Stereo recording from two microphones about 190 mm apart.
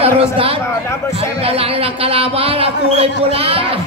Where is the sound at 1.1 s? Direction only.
30° right (ahead or behind).